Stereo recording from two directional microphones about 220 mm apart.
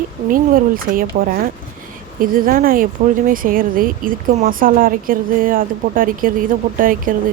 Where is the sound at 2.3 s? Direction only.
40° right (ahead or behind).